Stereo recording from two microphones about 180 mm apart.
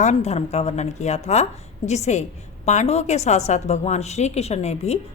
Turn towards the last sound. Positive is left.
turn(degrees=35)  # may be behind; listen again after turning